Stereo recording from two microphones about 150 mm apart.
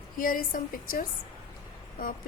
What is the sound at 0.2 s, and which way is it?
A woman's voice, 70° left (ahead or behind).